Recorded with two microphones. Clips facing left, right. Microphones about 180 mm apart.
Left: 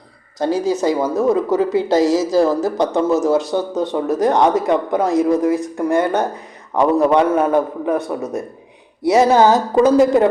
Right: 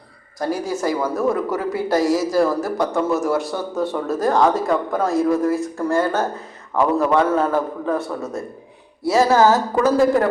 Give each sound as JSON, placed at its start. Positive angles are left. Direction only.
{"t": 0.3, "sound": "a woman's voice", "side_deg": 20}